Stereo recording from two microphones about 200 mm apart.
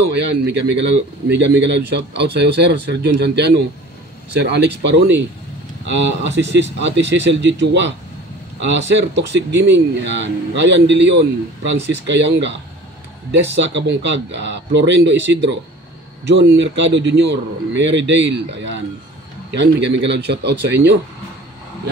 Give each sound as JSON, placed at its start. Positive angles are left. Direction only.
{"t": 0.0, "sound": "speech", "side_deg": -60}